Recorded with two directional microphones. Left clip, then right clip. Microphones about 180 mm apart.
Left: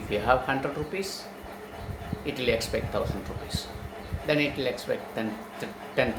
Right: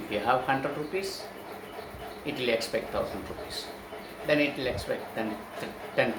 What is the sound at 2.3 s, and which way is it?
Speech, 25° left (ahead or behind).